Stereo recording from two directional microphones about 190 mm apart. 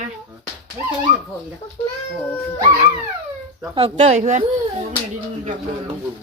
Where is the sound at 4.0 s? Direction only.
35° right (ahead or behind).